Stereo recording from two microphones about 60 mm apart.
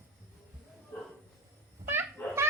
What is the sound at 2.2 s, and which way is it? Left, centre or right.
Baby laughter, left.